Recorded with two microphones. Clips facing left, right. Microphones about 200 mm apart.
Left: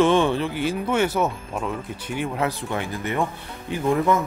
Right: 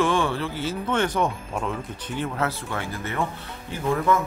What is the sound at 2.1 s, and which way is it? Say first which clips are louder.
Speech: left 2 dB; 15° left (ahead or behind).